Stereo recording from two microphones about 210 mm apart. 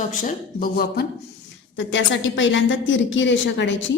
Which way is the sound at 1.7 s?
65° left (ahead or behind).